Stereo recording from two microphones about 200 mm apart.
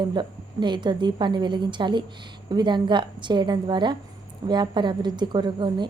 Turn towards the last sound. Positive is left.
turn(degrees=-20)  # may be behind; listen again after turning